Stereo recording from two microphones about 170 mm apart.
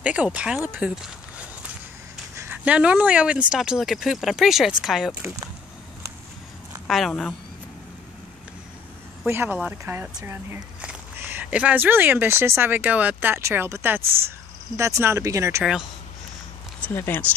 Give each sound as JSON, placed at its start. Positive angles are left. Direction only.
{"t": 0.0, "sound": "speech", "side_deg": -5}
{"t": 2.3, "sound": "speech", "side_deg": -10}
{"t": 6.9, "sound": "speech", "side_deg": 0}
{"t": 9.2, "sound": "speech", "side_deg": -15}
{"t": 16.8, "sound": "speech", "side_deg": 10}